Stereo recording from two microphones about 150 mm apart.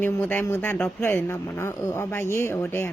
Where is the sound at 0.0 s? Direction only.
15° left (ahead or behind).